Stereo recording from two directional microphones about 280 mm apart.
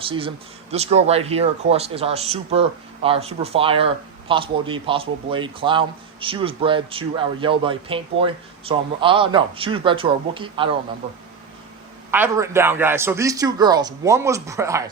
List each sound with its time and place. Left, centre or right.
0.0 s speech: centre
12.1 s a man's voice: centre